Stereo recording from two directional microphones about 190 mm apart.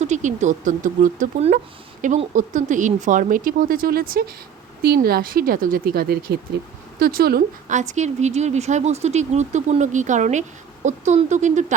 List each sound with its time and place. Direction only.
0.0 s speech: 40° right (ahead or behind)